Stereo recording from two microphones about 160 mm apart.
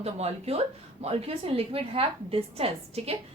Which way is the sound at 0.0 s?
40° right (ahead or behind).